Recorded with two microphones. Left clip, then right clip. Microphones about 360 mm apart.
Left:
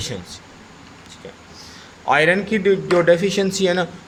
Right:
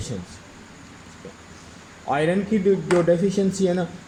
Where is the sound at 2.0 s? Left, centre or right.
Left.